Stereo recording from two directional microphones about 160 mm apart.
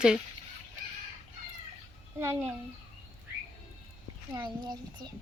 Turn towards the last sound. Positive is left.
turn(degrees=-25)  # may be behind; listen again after turning